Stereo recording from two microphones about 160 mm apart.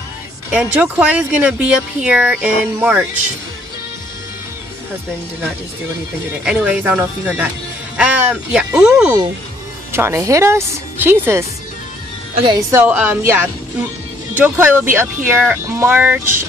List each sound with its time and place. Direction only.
0.5 s speech: 10° right (ahead or behind)
6.4 s speech: 10° right (ahead or behind)
12.5 s speech: 15° right (ahead or behind)